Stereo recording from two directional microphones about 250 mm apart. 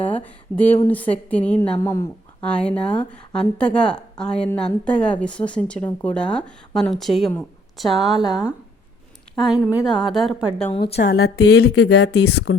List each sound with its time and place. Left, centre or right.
0.0 s a sound: centre
0.9 s a woman's voice: centre
10.7 s a woman's voice: left
10.9 s speech: left
11.3 s speech: left
11.7 s speech: left